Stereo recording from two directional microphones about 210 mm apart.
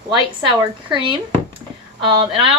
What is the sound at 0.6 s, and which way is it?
Speech, 20° right (ahead or behind).